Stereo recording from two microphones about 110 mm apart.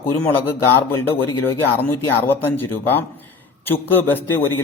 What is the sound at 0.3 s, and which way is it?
A man's voice, 20° left (ahead or behind).